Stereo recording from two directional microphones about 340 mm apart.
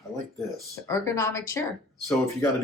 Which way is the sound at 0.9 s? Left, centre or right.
Centre.